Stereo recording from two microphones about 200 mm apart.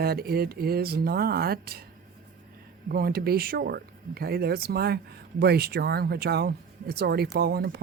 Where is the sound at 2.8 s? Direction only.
50° right (ahead or behind).